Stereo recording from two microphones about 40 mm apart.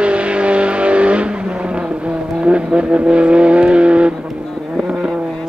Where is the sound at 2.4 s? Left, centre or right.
Right.